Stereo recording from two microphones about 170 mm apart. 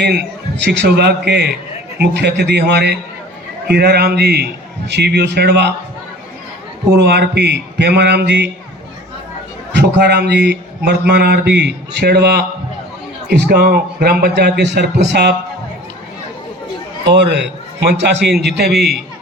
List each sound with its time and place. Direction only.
0.0 s a man's voice: 85° right
3.7 s a man's voice: 70° right (ahead or behind)
6.9 s a man's voice: 75° right (ahead or behind)
9.7 s a man's voice: 85° right
17.1 s a man's voice: 90° right